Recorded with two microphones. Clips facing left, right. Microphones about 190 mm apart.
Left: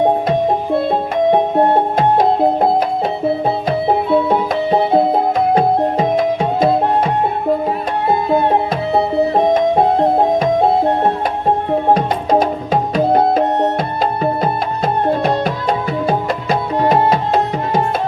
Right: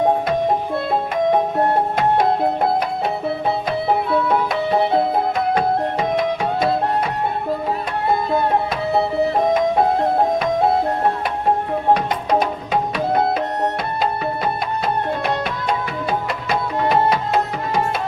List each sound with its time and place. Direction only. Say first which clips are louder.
0.0 s music: left 3 dB; 25° left (ahead or behind)
3.7 s music: left 6 dB; 30° left (ahead or behind)
9.7 s music: left 4 dB; 25° left (ahead or behind)
12.4 s tabla: left 4 dB; 40° left (ahead or behind)
13.4 s music: left 6 dB; 25° left (ahead or behind)
14.0 s music: left 4 dB; 45° left (ahead or behind)
16.0 s music: left 4 dB; 40° left (ahead or behind)